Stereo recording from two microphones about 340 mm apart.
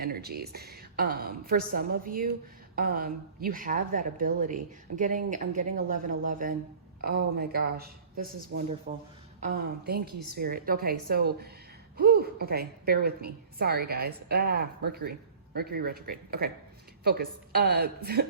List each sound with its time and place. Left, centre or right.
0.0 s a woman's voice: right